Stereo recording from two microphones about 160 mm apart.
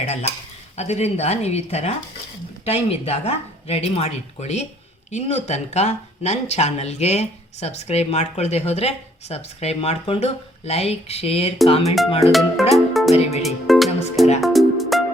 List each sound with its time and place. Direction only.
0.0 s speech: 40° left (ahead or behind)
12.3 s music: centre (ahead or behind)